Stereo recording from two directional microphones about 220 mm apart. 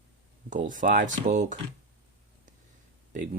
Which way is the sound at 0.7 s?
35° right (ahead or behind).